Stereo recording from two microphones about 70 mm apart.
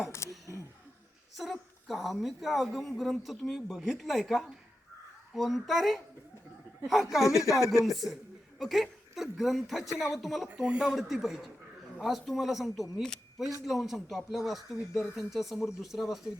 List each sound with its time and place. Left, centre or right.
0.2 s a sound: left
1.4 s a woman's voice: centre
7.3 s speech: left
7.9 s a woman's voice: centre